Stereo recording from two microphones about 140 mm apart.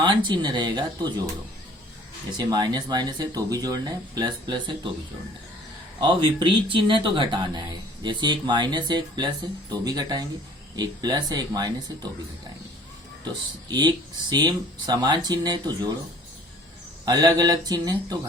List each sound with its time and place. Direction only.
0.0 s speech: 35° right (ahead or behind)
2.4 s speech: 30° right (ahead or behind)
6.0 s speech: 35° right (ahead or behind)
13.2 s speech: 30° right (ahead or behind)
17.1 s speech: 25° right (ahead or behind)